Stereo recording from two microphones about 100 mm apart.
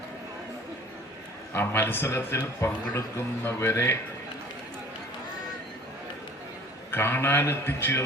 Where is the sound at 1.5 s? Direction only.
25° left (ahead or behind).